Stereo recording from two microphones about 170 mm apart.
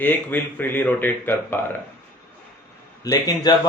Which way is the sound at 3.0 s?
20° left (ahead or behind).